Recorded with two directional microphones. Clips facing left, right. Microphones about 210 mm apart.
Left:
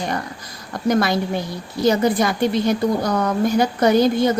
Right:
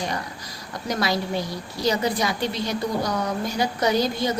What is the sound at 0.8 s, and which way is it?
A woman's voice, 50° left (ahead or behind).